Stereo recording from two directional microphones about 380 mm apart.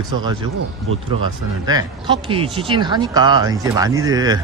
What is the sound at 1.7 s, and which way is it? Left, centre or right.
Speech, centre.